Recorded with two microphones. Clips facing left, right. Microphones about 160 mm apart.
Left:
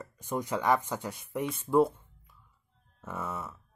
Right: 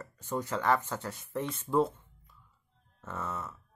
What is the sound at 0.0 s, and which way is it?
Speech, 15° left (ahead or behind).